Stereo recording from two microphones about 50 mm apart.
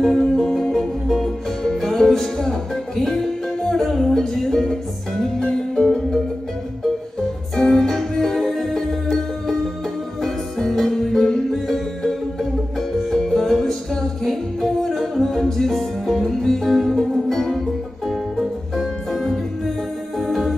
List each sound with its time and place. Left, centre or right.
0.0 s music: centre
3.6 s music: centre
7.2 s music: centre